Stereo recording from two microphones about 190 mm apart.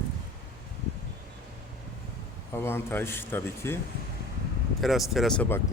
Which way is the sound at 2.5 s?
10° left (ahead or behind).